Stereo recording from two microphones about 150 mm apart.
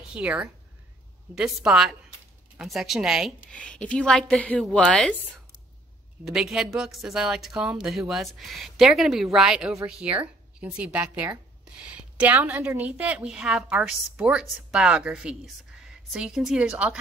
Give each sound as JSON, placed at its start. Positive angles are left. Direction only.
{"t": 0.1, "sound": "a woman's voice", "side_deg": -10}
{"t": 3.5, "sound": "a woman's voice", "side_deg": 10}
{"t": 6.2, "sound": "a woman's voice", "side_deg": -5}